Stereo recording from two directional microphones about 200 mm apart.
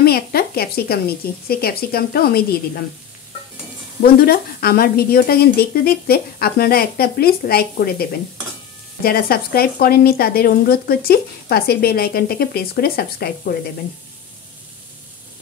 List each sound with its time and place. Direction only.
0.0 s a woman's voice: 50° left (ahead or behind)
4.0 s a woman's voice: 50° left (ahead or behind)